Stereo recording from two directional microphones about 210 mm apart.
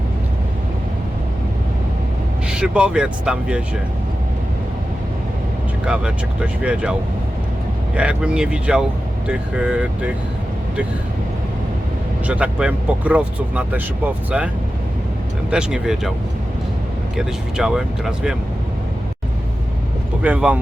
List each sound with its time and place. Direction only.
2.5 s speech: 5° right (ahead or behind)
5.8 s speech: 5° right (ahead or behind)
7.9 s speech: 5° right (ahead or behind)
12.2 s speech: 5° right (ahead or behind)
17.2 s speech: centre (ahead or behind)
20.2 s speech: 5° right (ahead or behind)